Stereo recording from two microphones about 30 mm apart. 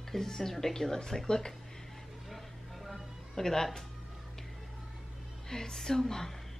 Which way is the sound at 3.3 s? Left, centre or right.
Centre.